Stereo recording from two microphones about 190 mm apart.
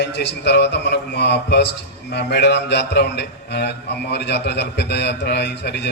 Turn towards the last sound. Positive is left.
turn(degrees=60)  # may be behind; listen again after turning